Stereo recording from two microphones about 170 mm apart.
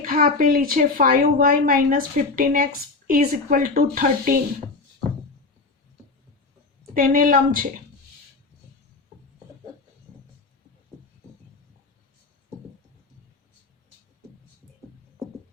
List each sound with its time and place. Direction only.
0.0 s a woman's voice: 55° right (ahead or behind)
6.9 s a woman's voice: 55° right (ahead or behind)